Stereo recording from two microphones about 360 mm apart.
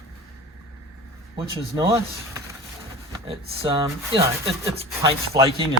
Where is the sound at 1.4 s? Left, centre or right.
Centre.